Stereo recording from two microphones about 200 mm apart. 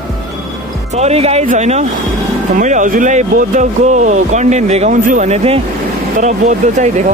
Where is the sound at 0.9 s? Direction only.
35° right (ahead or behind).